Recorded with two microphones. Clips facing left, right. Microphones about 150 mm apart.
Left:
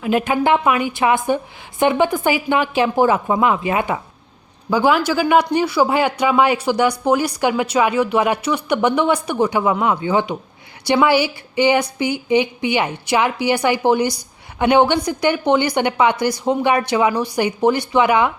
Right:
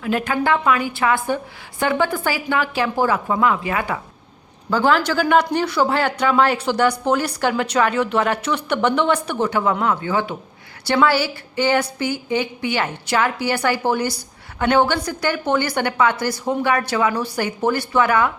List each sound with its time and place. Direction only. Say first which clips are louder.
0.0 s a woman's voice: left 3 dB; 15° left (ahead or behind)
4.7 s speech: left 2 dB; 10° left (ahead or behind)